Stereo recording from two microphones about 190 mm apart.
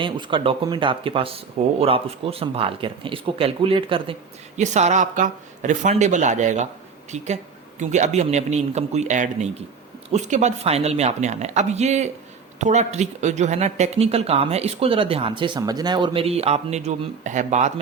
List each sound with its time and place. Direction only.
0.0 s speech: 25° right (ahead or behind)